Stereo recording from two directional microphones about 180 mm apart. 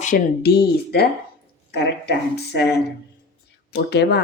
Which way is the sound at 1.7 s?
70° left (ahead or behind).